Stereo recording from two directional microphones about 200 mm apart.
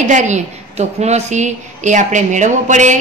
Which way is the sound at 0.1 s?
35° right (ahead or behind).